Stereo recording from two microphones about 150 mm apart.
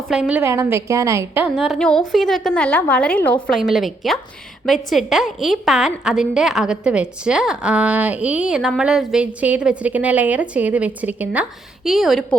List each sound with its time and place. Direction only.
0.1 s a woman's voice: 5° right (ahead or behind)
0.4 s a woman's voice: 20° right (ahead or behind)
1.5 s a woman's voice: centre (ahead or behind)
3.4 s a woman's voice: centre (ahead or behind)